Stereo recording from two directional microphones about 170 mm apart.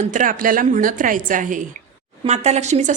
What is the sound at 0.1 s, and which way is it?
A woman's voice, 50° right (ahead or behind).